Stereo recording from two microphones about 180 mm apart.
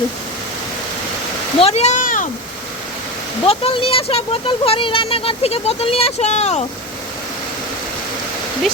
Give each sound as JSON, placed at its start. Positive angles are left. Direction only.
{"t": 1.5, "sound": "speech", "side_deg": 35}
{"t": 3.4, "sound": "speech", "side_deg": 30}